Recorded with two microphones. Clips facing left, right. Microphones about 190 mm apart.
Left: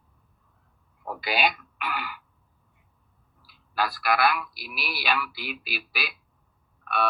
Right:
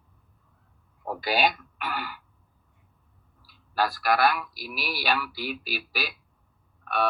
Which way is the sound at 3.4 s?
45° right (ahead or behind).